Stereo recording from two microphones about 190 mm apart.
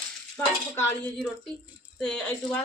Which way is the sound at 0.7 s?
10° left (ahead or behind).